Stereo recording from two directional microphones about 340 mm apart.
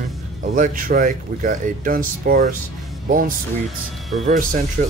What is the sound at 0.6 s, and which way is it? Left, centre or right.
Speech, right.